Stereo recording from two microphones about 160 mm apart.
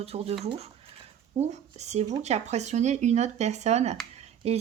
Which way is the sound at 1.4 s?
45° right (ahead or behind).